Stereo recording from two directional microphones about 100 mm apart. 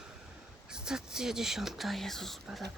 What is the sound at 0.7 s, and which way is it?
Speech, 5° right (ahead or behind).